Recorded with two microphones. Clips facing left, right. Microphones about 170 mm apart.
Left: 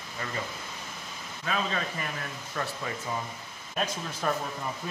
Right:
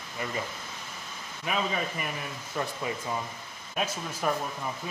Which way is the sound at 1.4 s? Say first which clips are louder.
Right 1 dB; 15° right (ahead or behind).